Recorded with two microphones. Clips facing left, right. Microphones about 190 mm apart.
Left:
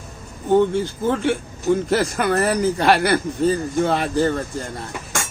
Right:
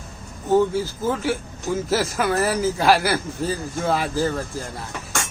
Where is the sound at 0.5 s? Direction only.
5° right (ahead or behind).